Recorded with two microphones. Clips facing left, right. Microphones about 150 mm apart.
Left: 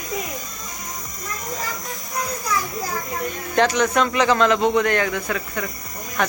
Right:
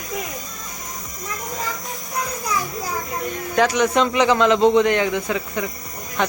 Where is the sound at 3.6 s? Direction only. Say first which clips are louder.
Right 1 dB; 10° right (ahead or behind).